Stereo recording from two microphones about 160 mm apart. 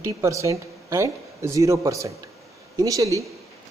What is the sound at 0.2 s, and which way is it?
Speech, 20° right (ahead or behind).